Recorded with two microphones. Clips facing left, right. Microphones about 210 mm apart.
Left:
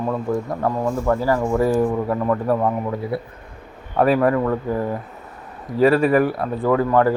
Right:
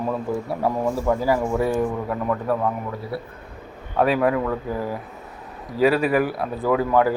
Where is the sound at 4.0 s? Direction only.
Centre (ahead or behind).